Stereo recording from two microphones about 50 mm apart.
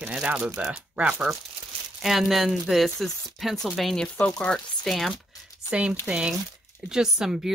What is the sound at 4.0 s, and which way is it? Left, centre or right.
Speech, centre.